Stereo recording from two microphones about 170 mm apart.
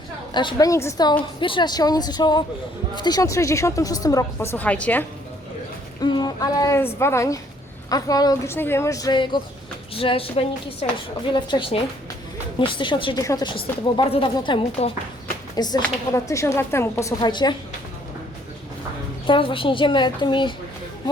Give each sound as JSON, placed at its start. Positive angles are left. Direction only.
{"t": 0.3, "sound": "speech", "side_deg": 25}
{"t": 6.0, "sound": "a woman's voice", "side_deg": 25}
{"t": 19.3, "sound": "speech", "side_deg": 30}